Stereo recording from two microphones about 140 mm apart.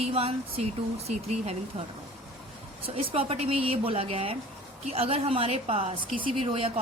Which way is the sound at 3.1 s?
45° right (ahead or behind).